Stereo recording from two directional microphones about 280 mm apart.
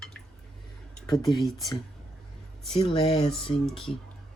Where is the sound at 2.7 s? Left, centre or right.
Centre.